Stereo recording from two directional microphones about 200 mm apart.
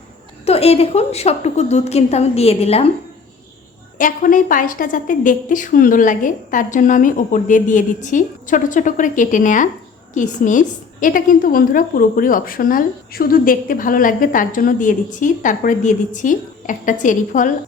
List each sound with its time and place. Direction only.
0.4 s a woman's voice: 30° left (ahead or behind)
3.9 s a woman's voice: 40° left (ahead or behind)